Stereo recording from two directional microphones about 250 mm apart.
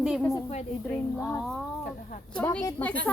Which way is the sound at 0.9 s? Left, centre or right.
Centre.